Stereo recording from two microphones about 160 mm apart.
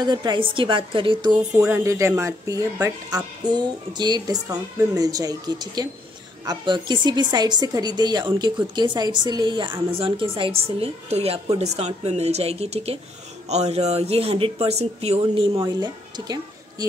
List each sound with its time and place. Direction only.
0.0 s speech: 25° right (ahead or behind)
1.8 s a woman's voice: 20° right (ahead or behind)